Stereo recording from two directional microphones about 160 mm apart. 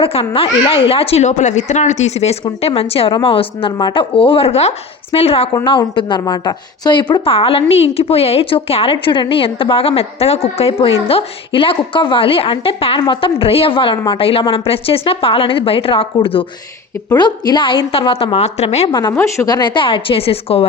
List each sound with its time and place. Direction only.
0.0 s a woman's voice: 35° left (ahead or behind)
18.9 s a woman's voice: 30° left (ahead or behind)
19.1 s a woman's voice: 15° left (ahead or behind); by 20.7 s 35° left (ahead or behind)